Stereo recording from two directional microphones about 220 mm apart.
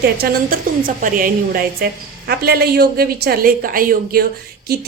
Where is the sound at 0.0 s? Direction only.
45° right (ahead or behind).